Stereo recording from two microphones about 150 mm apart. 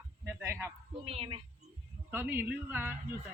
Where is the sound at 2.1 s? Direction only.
15° right (ahead or behind).